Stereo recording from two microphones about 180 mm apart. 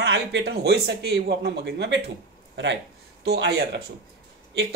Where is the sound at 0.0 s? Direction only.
70° right (ahead or behind).